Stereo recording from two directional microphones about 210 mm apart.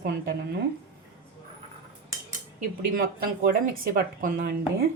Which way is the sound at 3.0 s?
45° right (ahead or behind).